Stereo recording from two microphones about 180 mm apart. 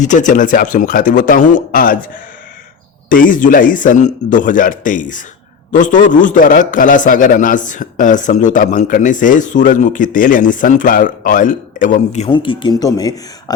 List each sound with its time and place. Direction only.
0.0 s a man's voice: 45° left (ahead or behind)
3.1 s a man's voice: 50° left (ahead or behind)
12.3 s speech: 30° left (ahead or behind)